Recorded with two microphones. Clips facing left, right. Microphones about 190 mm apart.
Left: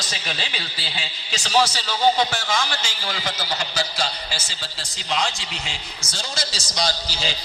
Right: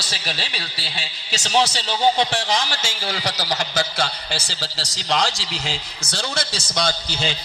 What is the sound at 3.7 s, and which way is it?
A man's voice, 55° right (ahead or behind).